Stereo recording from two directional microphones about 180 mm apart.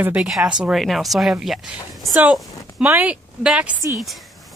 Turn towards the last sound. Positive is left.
turn(degrees=-5)  # may be behind; listen again after turning